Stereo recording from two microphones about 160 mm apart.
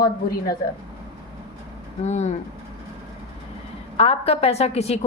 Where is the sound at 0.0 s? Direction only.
70° left (ahead or behind).